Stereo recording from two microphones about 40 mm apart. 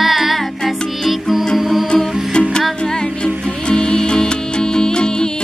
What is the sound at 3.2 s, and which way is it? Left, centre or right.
Music, centre.